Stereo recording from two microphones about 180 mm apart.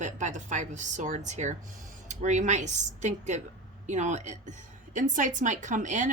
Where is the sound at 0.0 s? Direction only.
45° right (ahead or behind).